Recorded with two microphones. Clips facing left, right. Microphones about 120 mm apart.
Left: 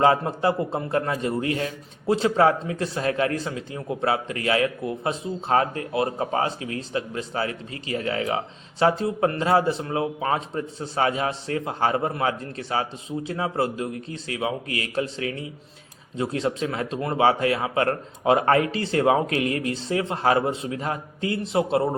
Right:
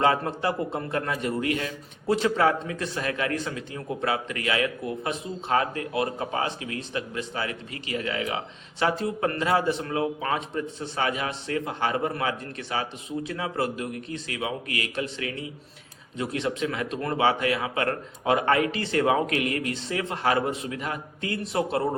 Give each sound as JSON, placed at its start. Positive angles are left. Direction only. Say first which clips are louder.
{"t": 0.0, "sound": "a man's voice", "louder": "left 4 dB", "side_deg": 30}